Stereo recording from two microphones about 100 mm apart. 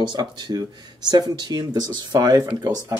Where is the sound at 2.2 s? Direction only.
30° right (ahead or behind).